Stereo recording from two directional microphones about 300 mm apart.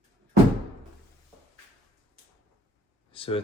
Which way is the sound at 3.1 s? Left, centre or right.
Centre.